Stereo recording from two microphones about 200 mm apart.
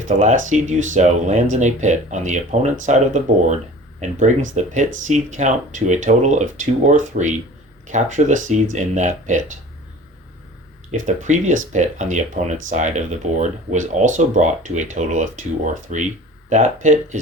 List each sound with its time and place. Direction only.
0.0 s speech: 35° right (ahead or behind)
10.9 s speech: 35° right (ahead or behind)